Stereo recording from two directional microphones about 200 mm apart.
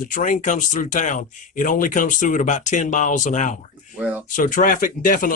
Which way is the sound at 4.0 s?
5° right (ahead or behind).